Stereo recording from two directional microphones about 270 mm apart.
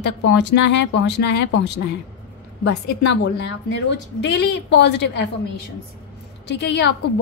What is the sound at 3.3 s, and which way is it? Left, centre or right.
A woman's voice, left.